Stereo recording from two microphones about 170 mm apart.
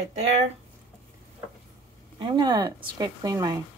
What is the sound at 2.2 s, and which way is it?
Speech, 30° right (ahead or behind).